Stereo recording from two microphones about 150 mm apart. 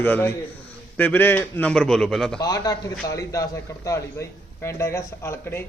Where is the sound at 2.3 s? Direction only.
25° left (ahead or behind).